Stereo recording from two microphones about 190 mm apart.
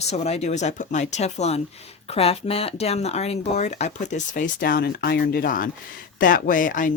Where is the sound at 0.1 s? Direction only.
35° left (ahead or behind).